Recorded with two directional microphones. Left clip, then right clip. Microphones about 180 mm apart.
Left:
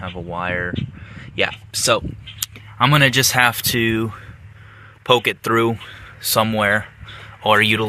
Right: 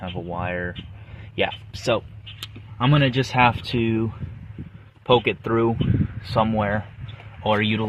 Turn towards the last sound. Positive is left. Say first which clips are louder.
# left 7 dB
turn(degrees=5)  # may be behind; listen again after turning